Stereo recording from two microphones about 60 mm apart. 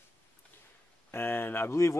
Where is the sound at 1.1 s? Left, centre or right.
Left.